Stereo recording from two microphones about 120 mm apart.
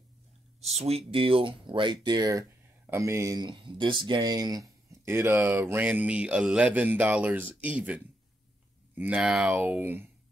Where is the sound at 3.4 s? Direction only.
40° right (ahead or behind).